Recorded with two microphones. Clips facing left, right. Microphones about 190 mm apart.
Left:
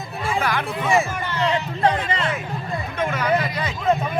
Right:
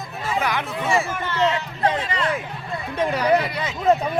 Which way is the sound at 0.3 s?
20° right (ahead or behind).